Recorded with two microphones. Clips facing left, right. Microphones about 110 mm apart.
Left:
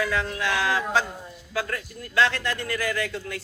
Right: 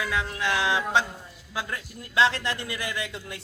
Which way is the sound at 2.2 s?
30° right (ahead or behind).